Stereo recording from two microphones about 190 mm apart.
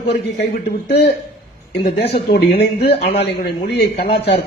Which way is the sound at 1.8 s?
55° left (ahead or behind).